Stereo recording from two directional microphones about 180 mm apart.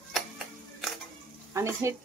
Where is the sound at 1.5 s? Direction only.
15° right (ahead or behind).